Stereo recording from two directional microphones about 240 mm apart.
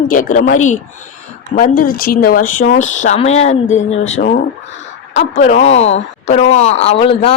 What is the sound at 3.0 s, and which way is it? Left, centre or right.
A woman's voice, left.